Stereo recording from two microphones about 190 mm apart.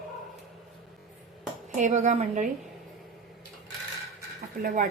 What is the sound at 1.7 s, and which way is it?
Speech, 40° right (ahead or behind).